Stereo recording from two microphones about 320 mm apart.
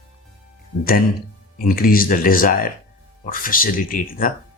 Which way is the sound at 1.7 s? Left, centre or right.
Left.